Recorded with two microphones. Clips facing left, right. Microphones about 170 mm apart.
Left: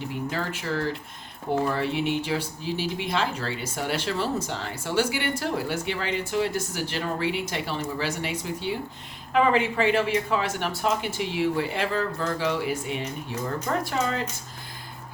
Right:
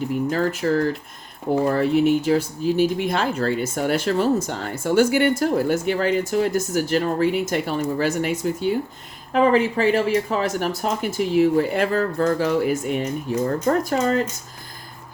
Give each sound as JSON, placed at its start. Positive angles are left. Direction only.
{"t": 0.3, "sound": "speech", "side_deg": -45}